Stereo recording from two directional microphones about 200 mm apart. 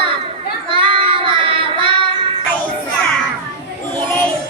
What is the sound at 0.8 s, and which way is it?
Child singing, 25° right (ahead or behind).